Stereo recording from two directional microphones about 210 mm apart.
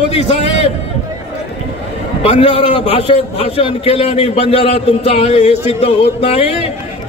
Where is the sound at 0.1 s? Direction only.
30° left (ahead or behind).